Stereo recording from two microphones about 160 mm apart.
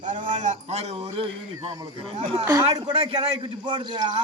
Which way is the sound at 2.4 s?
20° right (ahead or behind).